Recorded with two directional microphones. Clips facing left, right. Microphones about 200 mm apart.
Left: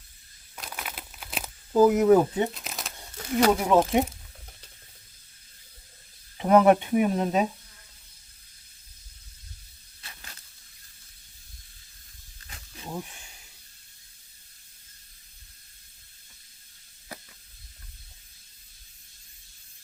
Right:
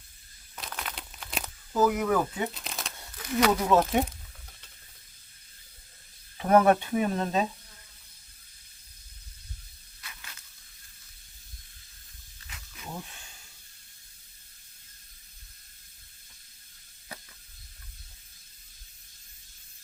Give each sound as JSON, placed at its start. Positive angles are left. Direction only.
{"t": 0.5, "sound": "crumpling", "side_deg": 5}
{"t": 1.7, "sound": "speech", "side_deg": 25}
{"t": 2.5, "sound": "crumpling", "side_deg": 0}
{"t": 3.3, "sound": "speech", "side_deg": 30}
{"t": 3.7, "sound": "speech", "side_deg": 15}
{"t": 6.3, "sound": "speech", "side_deg": 20}
{"t": 10.0, "sound": "a sound", "side_deg": 35}
{"t": 12.5, "sound": "wild animals", "side_deg": 35}
{"t": 12.9, "sound": "a sound", "side_deg": 15}